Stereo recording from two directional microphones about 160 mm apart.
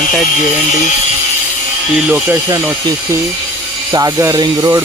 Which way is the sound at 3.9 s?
20° right (ahead or behind).